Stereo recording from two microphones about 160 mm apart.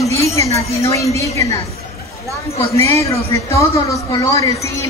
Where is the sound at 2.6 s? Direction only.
20° left (ahead or behind).